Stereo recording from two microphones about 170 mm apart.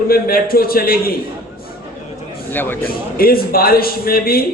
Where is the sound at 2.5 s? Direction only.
10° left (ahead or behind).